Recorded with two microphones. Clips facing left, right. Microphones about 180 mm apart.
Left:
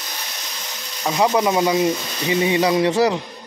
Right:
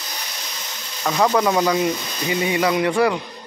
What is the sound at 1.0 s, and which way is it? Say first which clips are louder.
Speech: even; 20° left (ahead or behind).